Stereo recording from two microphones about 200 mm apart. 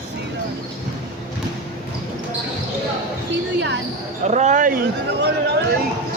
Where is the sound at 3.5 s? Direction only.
60° right (ahead or behind).